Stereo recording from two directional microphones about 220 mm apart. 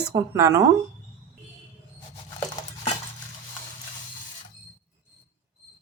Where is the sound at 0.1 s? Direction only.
15° right (ahead or behind).